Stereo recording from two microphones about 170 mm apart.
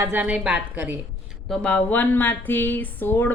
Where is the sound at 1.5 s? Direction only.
5° left (ahead or behind).